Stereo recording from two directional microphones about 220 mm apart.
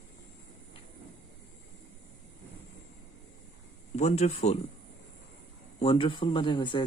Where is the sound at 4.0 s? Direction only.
30° left (ahead or behind).